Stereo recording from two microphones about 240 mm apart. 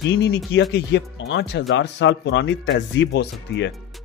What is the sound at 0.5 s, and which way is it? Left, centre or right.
Speech, left.